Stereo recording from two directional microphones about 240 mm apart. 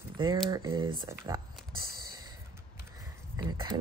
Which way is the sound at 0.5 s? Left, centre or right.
Centre.